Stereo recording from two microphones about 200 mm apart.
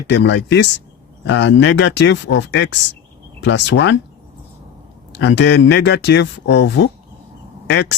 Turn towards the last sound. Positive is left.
turn(degrees=60)  # may be behind; listen again after turning